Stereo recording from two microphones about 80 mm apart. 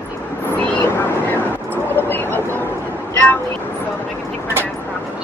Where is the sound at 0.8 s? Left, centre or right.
Left.